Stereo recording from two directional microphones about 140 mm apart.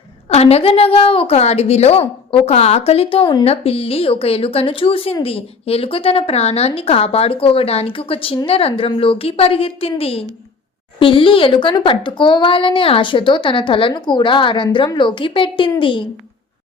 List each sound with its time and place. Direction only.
0.3 s a woman's voice: 50° left (ahead or behind)